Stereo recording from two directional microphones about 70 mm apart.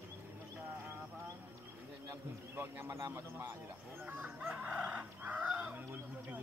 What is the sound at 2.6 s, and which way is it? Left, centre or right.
Speech, right.